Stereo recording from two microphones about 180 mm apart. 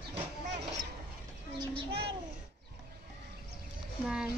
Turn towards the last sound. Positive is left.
turn(degrees=-5)  # may be behind; listen again after turning